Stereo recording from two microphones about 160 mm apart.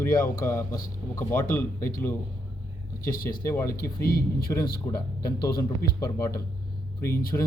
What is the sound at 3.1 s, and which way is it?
Speech, 65° left (ahead or behind).